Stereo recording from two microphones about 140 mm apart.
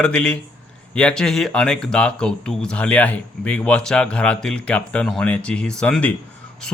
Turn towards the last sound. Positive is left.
turn(degrees=5)  # may be behind; listen again after turning